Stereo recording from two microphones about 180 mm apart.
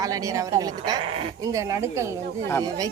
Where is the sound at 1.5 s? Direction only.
15° right (ahead or behind).